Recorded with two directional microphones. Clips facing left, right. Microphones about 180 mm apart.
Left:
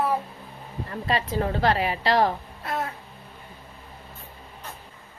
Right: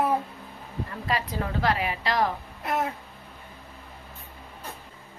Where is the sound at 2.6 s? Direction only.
20° right (ahead or behind).